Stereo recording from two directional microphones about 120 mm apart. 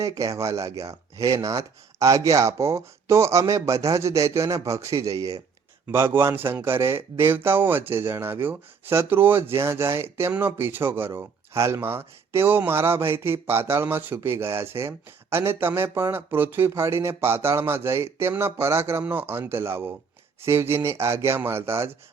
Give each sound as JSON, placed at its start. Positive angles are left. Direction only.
{"t": 0.0, "sound": "speech", "side_deg": -25}